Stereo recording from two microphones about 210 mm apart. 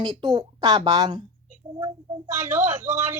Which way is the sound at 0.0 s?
20° right (ahead or behind).